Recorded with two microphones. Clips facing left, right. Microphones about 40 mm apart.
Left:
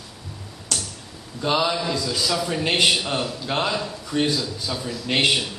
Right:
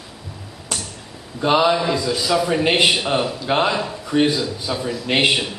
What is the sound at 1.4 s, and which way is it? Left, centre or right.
A man's voice, centre.